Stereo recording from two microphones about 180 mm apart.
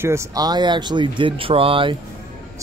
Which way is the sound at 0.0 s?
15° right (ahead or behind).